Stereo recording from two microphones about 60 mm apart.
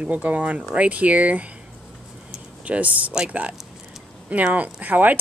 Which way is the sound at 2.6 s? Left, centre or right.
Right.